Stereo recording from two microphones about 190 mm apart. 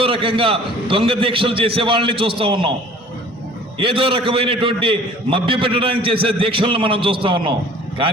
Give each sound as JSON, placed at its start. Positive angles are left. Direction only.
{"t": 0.0, "sound": "a man's voice", "side_deg": -30}
{"t": 3.8, "sound": "a man's voice", "side_deg": -30}